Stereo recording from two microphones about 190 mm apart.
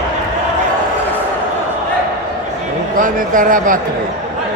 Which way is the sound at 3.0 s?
45° right (ahead or behind).